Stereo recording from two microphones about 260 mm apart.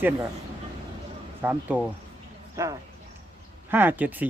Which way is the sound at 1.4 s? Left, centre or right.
Centre.